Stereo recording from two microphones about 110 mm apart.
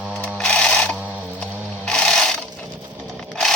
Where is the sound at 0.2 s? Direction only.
10° left (ahead or behind).